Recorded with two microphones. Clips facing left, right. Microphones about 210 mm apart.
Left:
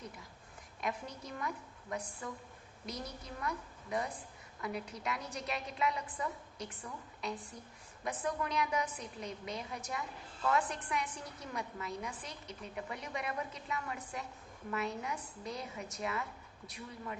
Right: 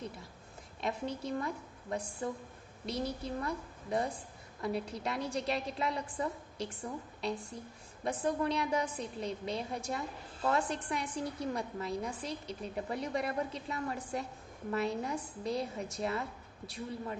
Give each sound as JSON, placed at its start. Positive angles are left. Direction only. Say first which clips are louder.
{"t": 0.8, "sound": "a woman's voice", "louder": "right 4 dB", "side_deg": -30}